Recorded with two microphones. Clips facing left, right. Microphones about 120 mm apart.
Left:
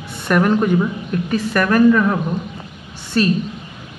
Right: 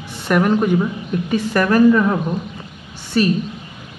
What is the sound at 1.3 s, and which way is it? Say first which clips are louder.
Speech: right 1 dB; 25° right (ahead or behind).